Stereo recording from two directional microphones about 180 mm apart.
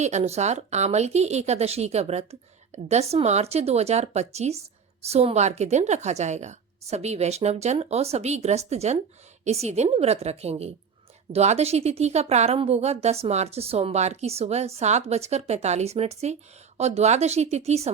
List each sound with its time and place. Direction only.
0.0 s a woman's voice: 40° right (ahead or behind)